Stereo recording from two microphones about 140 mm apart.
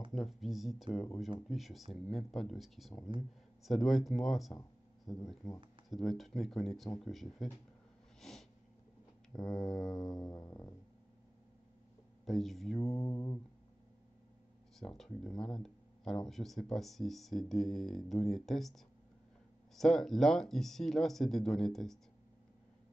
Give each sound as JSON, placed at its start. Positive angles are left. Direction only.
{"t": 0.1, "sound": "speech", "side_deg": 0}
{"t": 8.2, "sound": "a sound", "side_deg": 5}
{"t": 9.4, "sound": "speech", "side_deg": 5}
{"t": 9.9, "sound": "music", "side_deg": 30}
{"t": 12.3, "sound": "speech", "side_deg": 0}
{"t": 12.8, "sound": "music", "side_deg": 25}
{"t": 14.8, "sound": "speech", "side_deg": 0}